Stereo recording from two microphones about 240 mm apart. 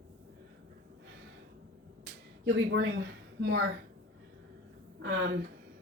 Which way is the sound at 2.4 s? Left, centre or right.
Right.